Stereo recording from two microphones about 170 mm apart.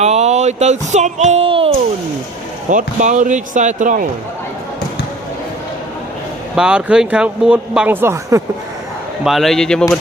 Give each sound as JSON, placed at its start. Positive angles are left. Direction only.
{"t": 0.0, "sound": "speech", "side_deg": -40}
{"t": 2.6, "sound": "speech", "side_deg": -45}
{"t": 6.6, "sound": "speech", "side_deg": -5}
{"t": 9.2, "sound": "speech", "side_deg": 0}